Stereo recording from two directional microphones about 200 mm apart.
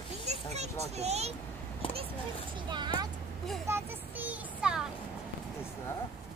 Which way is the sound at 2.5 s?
20° right (ahead or behind).